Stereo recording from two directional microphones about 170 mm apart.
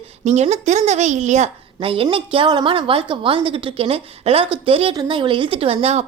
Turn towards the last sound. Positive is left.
turn(degrees=-35)  # may be behind; listen again after turning